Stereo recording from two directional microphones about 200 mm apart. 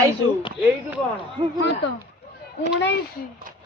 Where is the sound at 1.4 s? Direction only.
25° right (ahead or behind).